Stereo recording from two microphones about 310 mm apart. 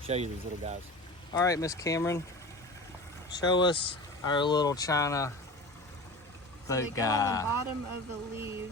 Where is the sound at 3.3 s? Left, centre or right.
Centre.